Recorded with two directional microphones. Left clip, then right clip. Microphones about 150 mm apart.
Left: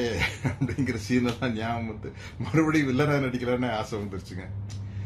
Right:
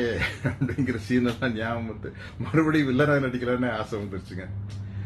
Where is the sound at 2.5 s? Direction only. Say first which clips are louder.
Right 1 dB; 30° left (ahead or behind).